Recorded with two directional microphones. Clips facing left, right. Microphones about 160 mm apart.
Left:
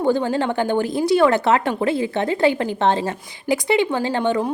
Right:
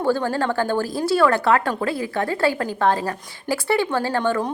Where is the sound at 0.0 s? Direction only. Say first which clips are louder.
Left 2 dB; 20° left (ahead or behind).